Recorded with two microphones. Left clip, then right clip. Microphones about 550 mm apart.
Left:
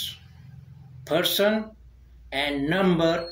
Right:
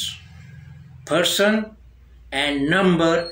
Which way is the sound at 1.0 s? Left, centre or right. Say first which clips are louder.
Right 4 dB; left.